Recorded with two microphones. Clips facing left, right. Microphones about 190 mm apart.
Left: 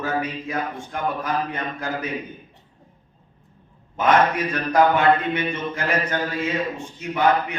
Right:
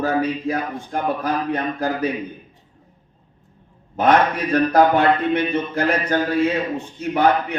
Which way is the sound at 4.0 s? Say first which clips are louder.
Right 2 dB; 35° right (ahead or behind).